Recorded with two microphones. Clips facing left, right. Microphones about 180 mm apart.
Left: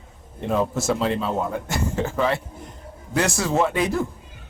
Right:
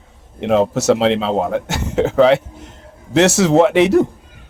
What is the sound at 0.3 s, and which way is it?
A man's voice, 80° right.